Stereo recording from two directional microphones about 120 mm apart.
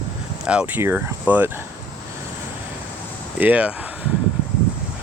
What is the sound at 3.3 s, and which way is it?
Speech, 10° right (ahead or behind).